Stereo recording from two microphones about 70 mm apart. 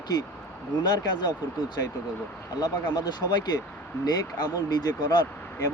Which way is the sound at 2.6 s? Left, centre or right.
Left.